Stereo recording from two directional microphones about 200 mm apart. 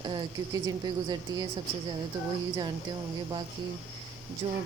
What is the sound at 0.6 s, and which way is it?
Speech, 20° right (ahead or behind).